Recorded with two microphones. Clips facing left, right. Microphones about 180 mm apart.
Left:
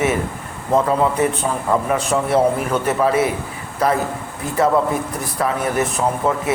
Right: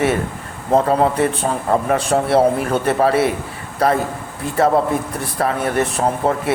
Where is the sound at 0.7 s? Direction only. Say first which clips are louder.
Right 2 dB; 35° right (ahead or behind).